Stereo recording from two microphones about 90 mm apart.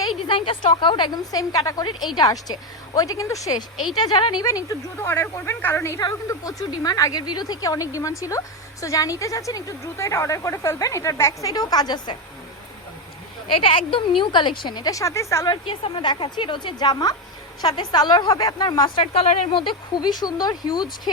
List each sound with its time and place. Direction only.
0.3 s a woman's voice: 70° left (ahead or behind); by 3.6 s 40° left (ahead or behind)
4.2 s a woman's voice: 50° left (ahead or behind)
4.4 s a woman's voice: 40° left (ahead or behind)
5.0 s speech: 30° left (ahead or behind)
6.2 s a woman's voice: 40° left (ahead or behind)
13.5 s a woman's voice: 75° left (ahead or behind); by 14.9 s 55° left (ahead or behind)
14.9 s a woman's voice: 35° left (ahead or behind)
15.7 s a woman's voice: 75° left (ahead or behind); by 19.0 s 55° left (ahead or behind)
19.1 s a woman's voice: 80° left
20.0 s a woman's voice: 50° left (ahead or behind)